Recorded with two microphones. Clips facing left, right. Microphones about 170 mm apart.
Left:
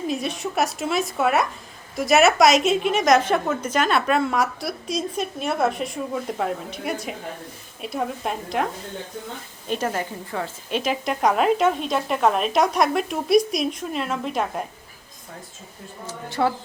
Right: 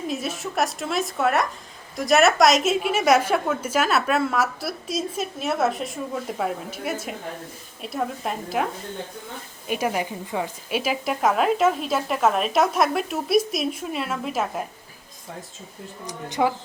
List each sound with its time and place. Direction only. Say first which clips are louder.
0.1 s a woman's voice: left 2 dB; centre (ahead or behind)
9.6 s a woman's voice: right 1 dB; 10° right (ahead or behind)
16.0 s speech: even; 15° right (ahead or behind)